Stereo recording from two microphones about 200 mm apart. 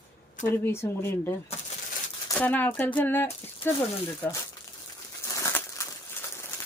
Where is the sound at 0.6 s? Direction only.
15° left (ahead or behind).